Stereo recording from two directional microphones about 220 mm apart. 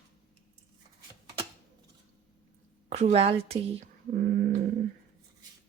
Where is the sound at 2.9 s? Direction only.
30° right (ahead or behind).